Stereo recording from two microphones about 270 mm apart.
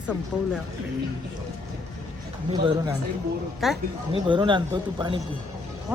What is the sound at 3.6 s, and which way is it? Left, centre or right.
Speech, centre.